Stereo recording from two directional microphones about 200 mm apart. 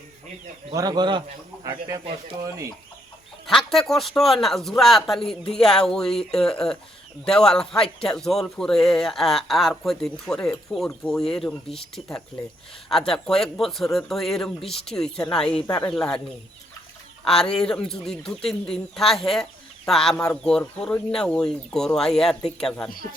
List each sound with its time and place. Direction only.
0.7 s speech: 20° right (ahead or behind)
3.4 s a man's voice: centre (ahead or behind)
17.2 s a man's voice: 5° left (ahead or behind)